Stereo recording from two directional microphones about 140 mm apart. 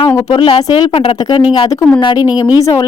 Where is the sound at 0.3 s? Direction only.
35° left (ahead or behind).